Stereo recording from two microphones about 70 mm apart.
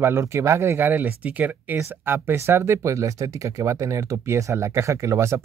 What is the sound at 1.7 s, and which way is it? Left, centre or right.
Speech, right.